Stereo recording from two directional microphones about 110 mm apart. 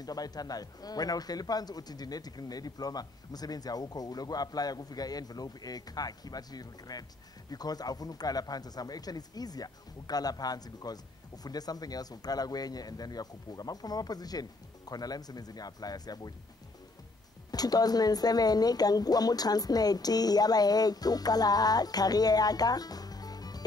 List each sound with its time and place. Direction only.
0.0 s speech: 35° left (ahead or behind)
17.5 s speech: 35° left (ahead or behind)